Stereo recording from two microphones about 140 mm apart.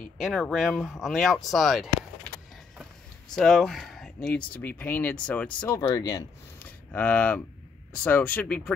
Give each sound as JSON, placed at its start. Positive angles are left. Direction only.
{"t": 0.0, "sound": "speech", "side_deg": 0}
{"t": 3.3, "sound": "speech", "side_deg": 0}
{"t": 4.3, "sound": "speech", "side_deg": 10}
{"t": 5.8, "sound": "speech", "side_deg": 30}
{"t": 6.6, "sound": "speech", "side_deg": 10}